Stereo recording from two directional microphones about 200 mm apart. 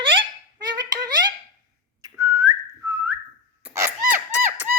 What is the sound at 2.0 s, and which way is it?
Whistling, 20° right (ahead or behind).